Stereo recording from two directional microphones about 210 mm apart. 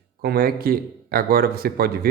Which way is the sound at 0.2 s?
45° right (ahead or behind).